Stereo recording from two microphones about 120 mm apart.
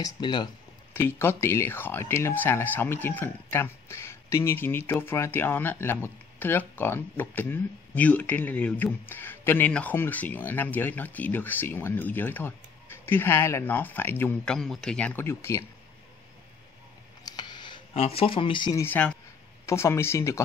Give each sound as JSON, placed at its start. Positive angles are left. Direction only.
{"t": 0.0, "sound": "speech", "side_deg": 40}
{"t": 0.9, "sound": "speech", "side_deg": 20}
{"t": 14.4, "sound": "speech", "side_deg": 5}
{"t": 15.2, "sound": "speech", "side_deg": 20}
{"t": 17.2, "sound": "a sound", "side_deg": 35}
{"t": 17.9, "sound": "speech", "side_deg": 55}
{"t": 18.8, "sound": "speech", "side_deg": 15}